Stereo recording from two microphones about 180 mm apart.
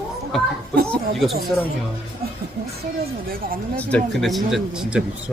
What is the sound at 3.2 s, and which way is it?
Speech, 55° right (ahead or behind).